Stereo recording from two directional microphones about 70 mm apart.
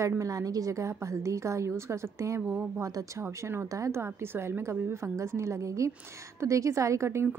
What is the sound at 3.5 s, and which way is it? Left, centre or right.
A woman's voice, right.